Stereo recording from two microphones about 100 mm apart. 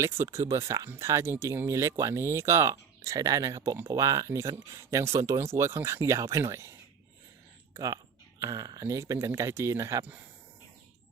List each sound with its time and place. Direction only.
0.0 s speech: 25° right (ahead or behind)